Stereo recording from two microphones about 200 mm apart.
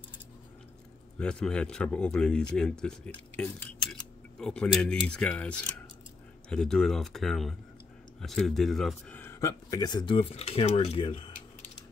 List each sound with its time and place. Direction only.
1.1 s speech: 5° left (ahead or behind); by 11.4 s 25° left (ahead or behind)